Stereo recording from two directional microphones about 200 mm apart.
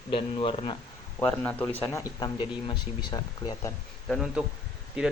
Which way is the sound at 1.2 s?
5° left (ahead or behind).